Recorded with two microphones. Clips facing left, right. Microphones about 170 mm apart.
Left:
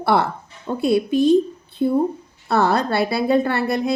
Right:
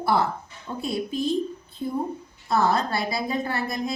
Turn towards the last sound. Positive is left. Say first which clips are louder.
# left 7 dB
turn(degrees=65)  # may be behind; listen again after turning